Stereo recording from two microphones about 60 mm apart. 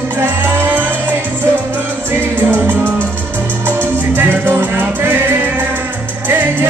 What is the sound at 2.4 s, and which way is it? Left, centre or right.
Music, right.